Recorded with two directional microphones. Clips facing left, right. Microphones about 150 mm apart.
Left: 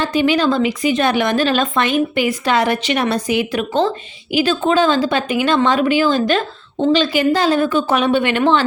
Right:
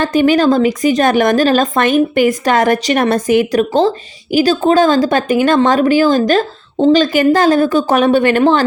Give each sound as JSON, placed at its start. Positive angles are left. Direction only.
{"t": 0.0, "sound": "speech", "side_deg": -45}